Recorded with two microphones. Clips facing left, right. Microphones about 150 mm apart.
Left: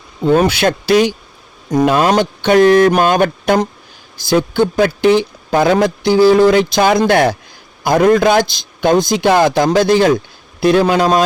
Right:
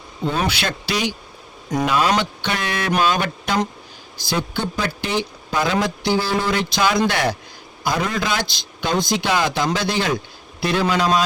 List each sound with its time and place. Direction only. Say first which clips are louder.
0.3 s speech: left 11 dB; 45° left (ahead or behind)